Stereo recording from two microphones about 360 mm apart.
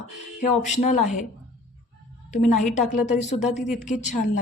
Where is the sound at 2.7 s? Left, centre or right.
Centre.